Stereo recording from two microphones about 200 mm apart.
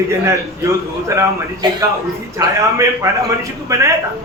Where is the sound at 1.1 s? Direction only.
15° right (ahead or behind).